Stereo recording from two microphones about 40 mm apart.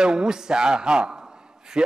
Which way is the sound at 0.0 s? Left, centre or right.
Centre.